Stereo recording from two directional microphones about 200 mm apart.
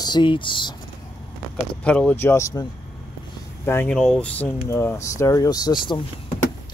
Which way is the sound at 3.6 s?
10° left (ahead or behind).